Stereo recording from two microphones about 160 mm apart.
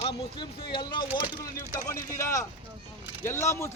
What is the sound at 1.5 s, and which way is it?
A man's voice, 15° left (ahead or behind).